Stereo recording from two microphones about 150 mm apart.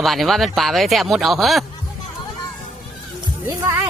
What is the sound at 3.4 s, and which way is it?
Speech, 20° right (ahead or behind).